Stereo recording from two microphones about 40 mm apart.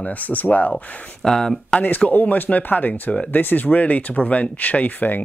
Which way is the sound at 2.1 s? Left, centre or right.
Left.